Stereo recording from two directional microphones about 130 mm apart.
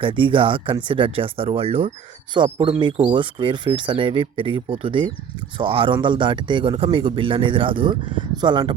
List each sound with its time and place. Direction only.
0.0 s a man's voice: 40° right (ahead or behind)
2.3 s a man's voice: 35° right (ahead or behind)